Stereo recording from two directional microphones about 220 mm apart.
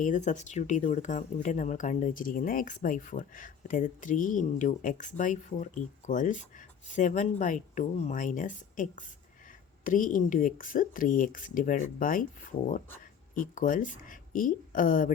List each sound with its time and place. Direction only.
0.0 s speech: 35° left (ahead or behind)